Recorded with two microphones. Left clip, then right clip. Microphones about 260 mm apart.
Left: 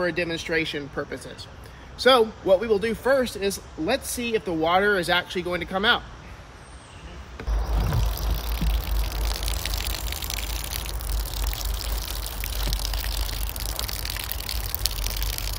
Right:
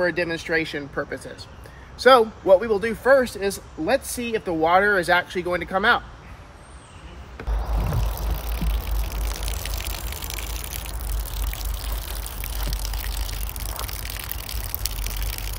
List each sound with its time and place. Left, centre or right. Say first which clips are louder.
0.0 s speech: right 3 dB; centre
8.5 s music: left 1 dB; centre
11.3 s a sound: left 3 dB; centre